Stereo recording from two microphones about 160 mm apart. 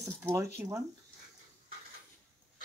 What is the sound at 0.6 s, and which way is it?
Speech, 10° right (ahead or behind).